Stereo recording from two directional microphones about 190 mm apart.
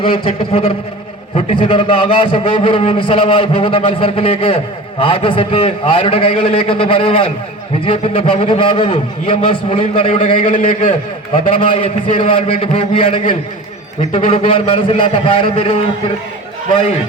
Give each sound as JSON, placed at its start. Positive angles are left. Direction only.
{"t": 0.0, "sound": "a man's voice", "side_deg": 30}
{"t": 11.6, "sound": "a man's voice", "side_deg": 30}
{"t": 14.2, "sound": "a man's voice", "side_deg": 30}